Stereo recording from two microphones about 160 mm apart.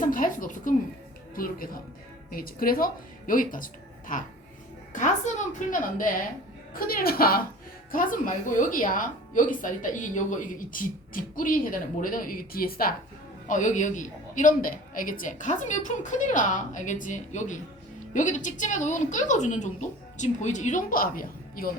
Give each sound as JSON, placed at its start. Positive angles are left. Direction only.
{"t": 0.0, "sound": "a woman's voice", "side_deg": 55}
{"t": 13.5, "sound": "speech", "side_deg": 50}